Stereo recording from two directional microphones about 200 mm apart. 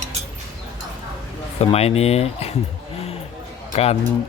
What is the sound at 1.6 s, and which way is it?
Speech, 30° left (ahead or behind).